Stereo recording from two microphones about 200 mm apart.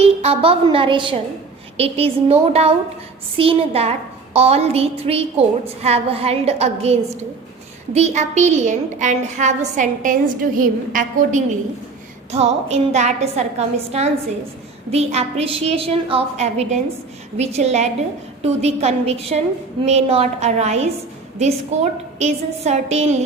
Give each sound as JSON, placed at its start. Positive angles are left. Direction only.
{"t": 0.0, "sound": "a woman's voice", "side_deg": -30}